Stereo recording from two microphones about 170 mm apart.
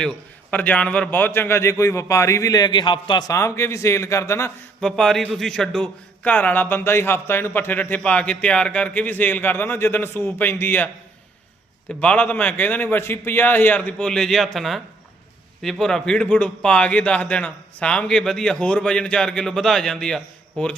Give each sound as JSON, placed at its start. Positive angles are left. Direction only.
{"t": 0.5, "sound": "a man's voice", "side_deg": 10}
{"t": 11.9, "sound": "a man's voice", "side_deg": 10}